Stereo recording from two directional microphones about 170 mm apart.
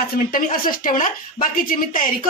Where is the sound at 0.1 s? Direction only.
55° left (ahead or behind).